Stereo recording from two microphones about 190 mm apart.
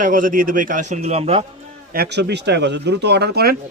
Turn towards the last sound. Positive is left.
turn(degrees=-55)  # may be behind; listen again after turning